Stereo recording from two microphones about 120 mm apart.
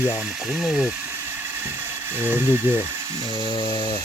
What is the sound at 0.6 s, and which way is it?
Speech, 5° right (ahead or behind).